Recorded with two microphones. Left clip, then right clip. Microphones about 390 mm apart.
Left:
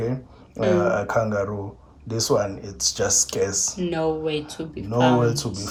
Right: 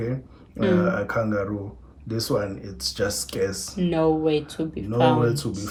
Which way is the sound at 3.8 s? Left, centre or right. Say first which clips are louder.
Right 5 dB; centre.